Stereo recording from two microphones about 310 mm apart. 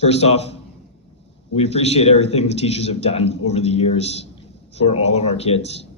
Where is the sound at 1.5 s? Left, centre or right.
Centre.